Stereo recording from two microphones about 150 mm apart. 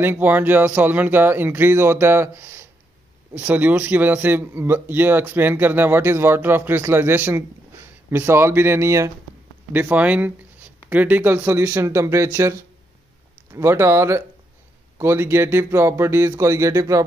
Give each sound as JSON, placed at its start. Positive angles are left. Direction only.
{"t": 0.0, "sound": "speech", "side_deg": -15}